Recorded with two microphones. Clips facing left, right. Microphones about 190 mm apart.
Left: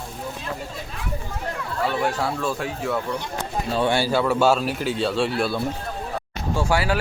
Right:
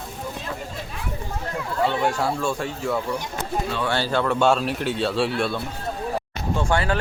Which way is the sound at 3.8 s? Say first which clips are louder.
Left 3 dB; 10° left (ahead or behind).